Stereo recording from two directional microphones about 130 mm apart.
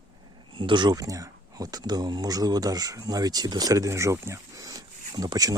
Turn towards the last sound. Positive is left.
turn(degrees=-30)  # may be behind; listen again after turning